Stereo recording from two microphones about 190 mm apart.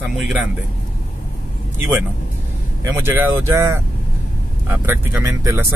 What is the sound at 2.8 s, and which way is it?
Speech, 15° right (ahead or behind).